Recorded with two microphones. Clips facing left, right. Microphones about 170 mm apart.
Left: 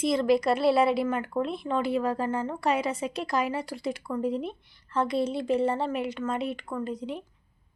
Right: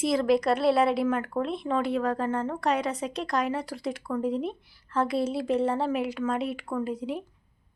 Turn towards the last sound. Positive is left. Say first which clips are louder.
# right 2 dB
turn(degrees=-5)  # may be behind; listen again after turning